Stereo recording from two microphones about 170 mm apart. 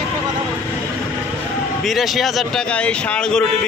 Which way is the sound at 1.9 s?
Centre (ahead or behind).